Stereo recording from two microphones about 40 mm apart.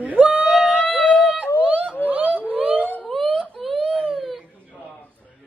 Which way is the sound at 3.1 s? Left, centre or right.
Centre.